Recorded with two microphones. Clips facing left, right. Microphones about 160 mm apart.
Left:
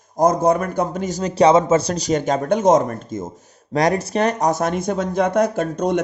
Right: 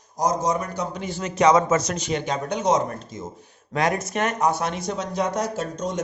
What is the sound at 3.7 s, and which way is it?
Speech, 35° left (ahead or behind).